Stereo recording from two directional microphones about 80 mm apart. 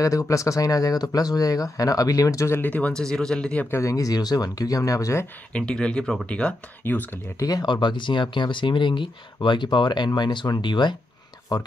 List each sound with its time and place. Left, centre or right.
0.0 s speech: left
2.6 s speech: left
2.9 s speech: centre
3.7 s speech: left
5.5 s speech: centre
7.3 s speech: left
7.6 s speech: left
11.5 s speech: left